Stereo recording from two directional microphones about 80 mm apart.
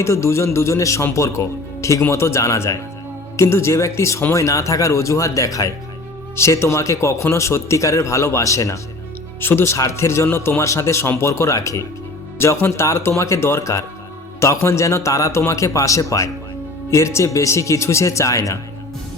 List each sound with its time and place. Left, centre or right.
0.0 s a man's voice: left
6.3 s a man's voice: left
9.4 s a man's voice: left